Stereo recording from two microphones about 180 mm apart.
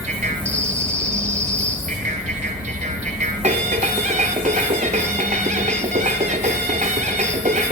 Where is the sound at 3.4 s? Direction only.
40° right (ahead or behind).